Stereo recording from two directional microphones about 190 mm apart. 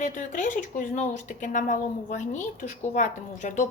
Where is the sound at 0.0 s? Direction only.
40° left (ahead or behind).